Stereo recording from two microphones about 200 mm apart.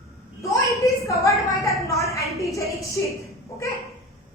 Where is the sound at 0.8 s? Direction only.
15° left (ahead or behind).